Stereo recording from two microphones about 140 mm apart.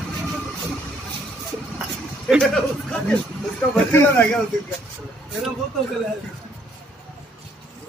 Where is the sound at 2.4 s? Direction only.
5° left (ahead or behind).